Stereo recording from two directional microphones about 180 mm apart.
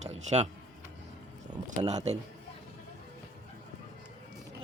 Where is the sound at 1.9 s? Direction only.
40° right (ahead or behind).